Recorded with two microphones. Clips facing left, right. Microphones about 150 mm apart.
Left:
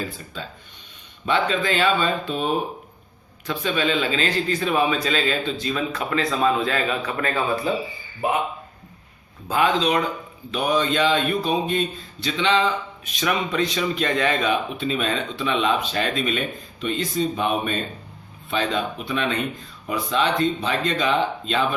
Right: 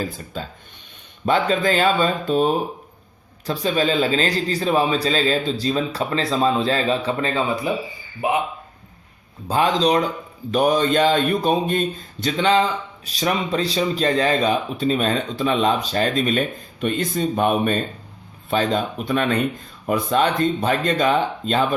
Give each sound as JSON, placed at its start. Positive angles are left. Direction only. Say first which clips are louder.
{"t": 0.4, "sound": "a man's voice", "louder": "right 4 dB", "side_deg": -40}
{"t": 9.5, "sound": "a man's voice", "louder": "right 2 dB", "side_deg": -35}